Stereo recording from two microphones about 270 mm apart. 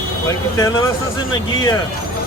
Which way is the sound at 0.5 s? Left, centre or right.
Centre.